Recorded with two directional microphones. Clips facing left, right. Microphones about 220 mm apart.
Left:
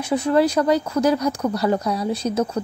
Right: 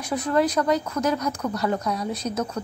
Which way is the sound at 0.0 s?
25° left (ahead or behind).